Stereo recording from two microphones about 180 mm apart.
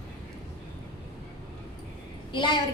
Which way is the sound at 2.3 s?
25° left (ahead or behind).